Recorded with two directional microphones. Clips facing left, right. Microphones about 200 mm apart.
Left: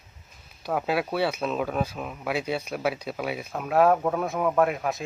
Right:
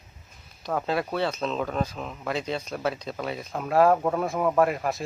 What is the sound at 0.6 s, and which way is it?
Speech, 5° left (ahead or behind).